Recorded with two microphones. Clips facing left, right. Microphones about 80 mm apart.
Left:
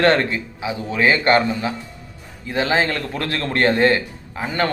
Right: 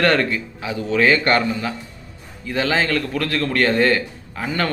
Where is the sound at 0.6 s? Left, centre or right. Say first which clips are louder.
Right 1 dB; centre.